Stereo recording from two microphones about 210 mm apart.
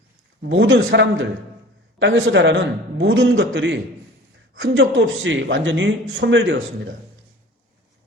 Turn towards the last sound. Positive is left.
turn(degrees=-60)  # may be behind; listen again after turning